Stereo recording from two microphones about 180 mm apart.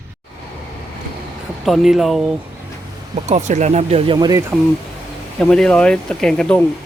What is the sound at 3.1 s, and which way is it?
Speech, 40° right (ahead or behind).